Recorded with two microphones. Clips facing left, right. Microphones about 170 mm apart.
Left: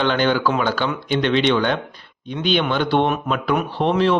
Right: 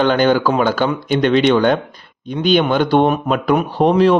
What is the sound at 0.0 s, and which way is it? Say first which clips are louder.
Speech: right 5 dB; 45° right (ahead or behind).